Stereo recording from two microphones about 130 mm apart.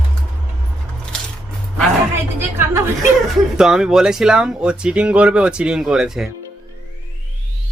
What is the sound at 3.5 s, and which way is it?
Speech, 5° right (ahead or behind).